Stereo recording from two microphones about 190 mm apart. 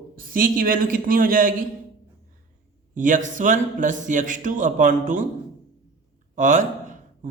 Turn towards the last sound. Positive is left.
turn(degrees=-40)  # may be behind; listen again after turning